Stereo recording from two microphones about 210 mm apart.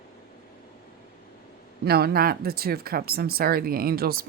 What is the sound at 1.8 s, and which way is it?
Speech, 50° right (ahead or behind).